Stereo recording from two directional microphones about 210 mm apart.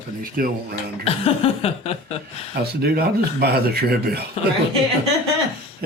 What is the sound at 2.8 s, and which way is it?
Speech, 50° right (ahead or behind).